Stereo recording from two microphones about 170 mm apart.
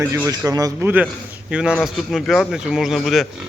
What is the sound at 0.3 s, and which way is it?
Speech, 20° right (ahead or behind).